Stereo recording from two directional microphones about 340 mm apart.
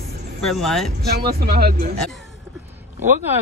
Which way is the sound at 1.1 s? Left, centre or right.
Right.